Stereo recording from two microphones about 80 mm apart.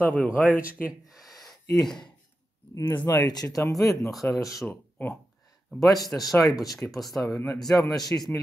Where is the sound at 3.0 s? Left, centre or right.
Left.